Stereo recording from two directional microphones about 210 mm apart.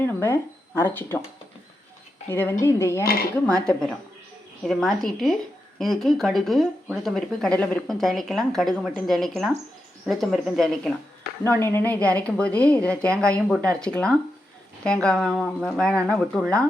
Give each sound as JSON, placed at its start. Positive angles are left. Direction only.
{"t": 0.0, "sound": "speech", "side_deg": 10}
{"t": 2.3, "sound": "a woman's voice", "side_deg": 10}
{"t": 3.0, "sound": "speech", "side_deg": 45}
{"t": 3.7, "sound": "speech", "side_deg": 5}